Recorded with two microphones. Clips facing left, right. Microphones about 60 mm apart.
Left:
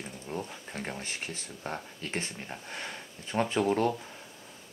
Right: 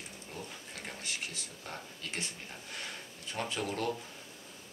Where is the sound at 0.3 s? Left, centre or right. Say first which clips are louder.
Left 8 dB; left.